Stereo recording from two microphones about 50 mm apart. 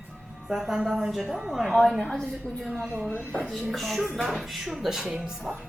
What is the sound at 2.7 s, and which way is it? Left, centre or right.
Speech, right.